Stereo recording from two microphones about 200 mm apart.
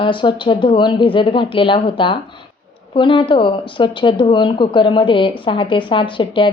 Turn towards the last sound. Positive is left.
turn(degrees=25)  # may be behind; listen again after turning